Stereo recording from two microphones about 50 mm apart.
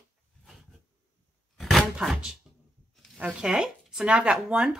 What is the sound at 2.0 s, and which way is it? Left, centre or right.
Speech, centre.